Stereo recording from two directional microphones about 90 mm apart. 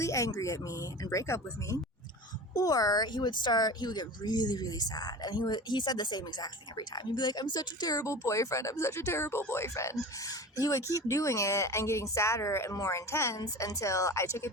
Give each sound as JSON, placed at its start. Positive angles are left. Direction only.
{"t": 0.0, "sound": "a sound", "side_deg": 35}
{"t": 0.3, "sound": "speech", "side_deg": 40}
{"t": 7.9, "sound": "speech", "side_deg": 35}